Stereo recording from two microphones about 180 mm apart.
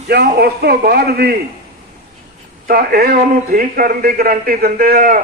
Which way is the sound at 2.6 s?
55° right (ahead or behind).